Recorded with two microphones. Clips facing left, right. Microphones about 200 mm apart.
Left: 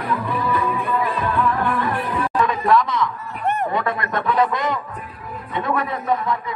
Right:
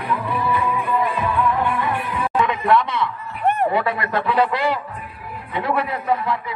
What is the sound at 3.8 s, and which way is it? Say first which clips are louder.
Speech: right 1 dB; 30° right (ahead or behind).